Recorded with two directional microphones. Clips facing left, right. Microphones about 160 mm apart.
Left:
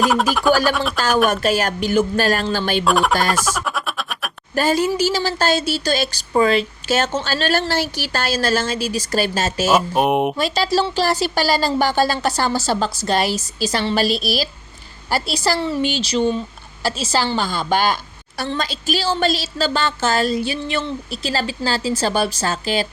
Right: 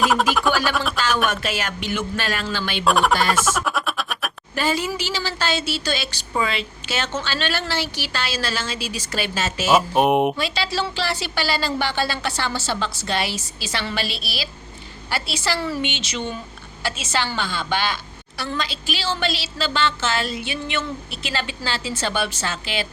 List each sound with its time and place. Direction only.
0.0 s mantra: centre (ahead or behind)
0.9 s speech: 40° left (ahead or behind)
2.8 s mantra: centre (ahead or behind)
3.6 s music: centre (ahead or behind)
4.5 s a woman's voice: 40° left (ahead or behind)
9.7 s mantra: centre (ahead or behind)
10.3 s a woman's voice: 45° left (ahead or behind)
15.5 s speech: 25° left (ahead or behind)
15.8 s speech: 35° left (ahead or behind)